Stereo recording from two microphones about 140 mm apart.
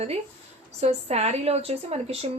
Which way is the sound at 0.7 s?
50° right (ahead or behind).